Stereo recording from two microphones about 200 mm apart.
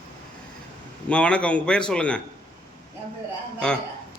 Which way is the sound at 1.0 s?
5° left (ahead or behind).